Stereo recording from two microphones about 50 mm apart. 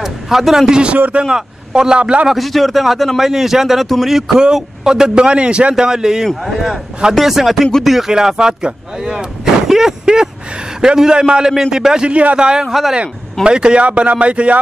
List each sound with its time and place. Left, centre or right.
0.0 s a sound: centre
1.2 s speech: centre
2.2 s a man's voice: centre
12.6 s a man's voice: centre
12.9 s speech: right